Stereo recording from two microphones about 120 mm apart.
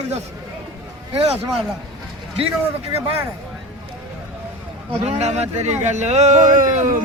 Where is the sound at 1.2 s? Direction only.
55° right (ahead or behind).